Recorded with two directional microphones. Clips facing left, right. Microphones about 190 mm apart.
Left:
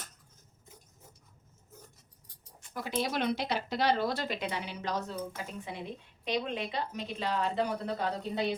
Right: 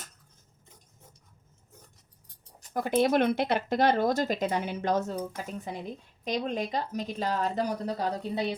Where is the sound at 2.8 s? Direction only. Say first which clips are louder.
Right 8 dB; 55° right (ahead or behind).